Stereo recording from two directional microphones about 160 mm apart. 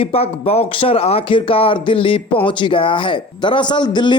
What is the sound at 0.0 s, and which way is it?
Speech, 40° left (ahead or behind).